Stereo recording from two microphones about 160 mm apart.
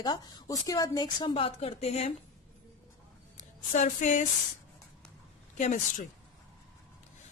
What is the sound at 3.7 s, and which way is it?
Speech, 50° left (ahead or behind).